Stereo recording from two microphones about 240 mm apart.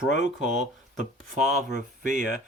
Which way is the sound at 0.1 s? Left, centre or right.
Left.